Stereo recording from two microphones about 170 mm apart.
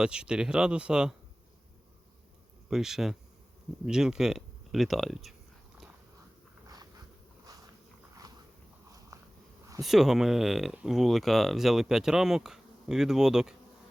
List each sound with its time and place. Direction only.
0.0 s speech: 5° right (ahead or behind)
2.6 s speech: centre (ahead or behind)
9.1 s a sound: 20° right (ahead or behind)
9.8 s speech: centre (ahead or behind)